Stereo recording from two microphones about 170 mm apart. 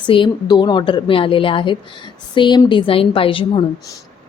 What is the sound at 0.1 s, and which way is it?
A woman's voice, 30° left (ahead or behind).